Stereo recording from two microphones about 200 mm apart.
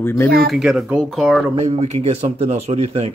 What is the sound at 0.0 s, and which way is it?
Speech, 10° left (ahead or behind).